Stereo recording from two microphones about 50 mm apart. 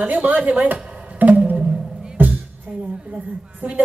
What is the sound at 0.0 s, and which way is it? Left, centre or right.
Speech, right.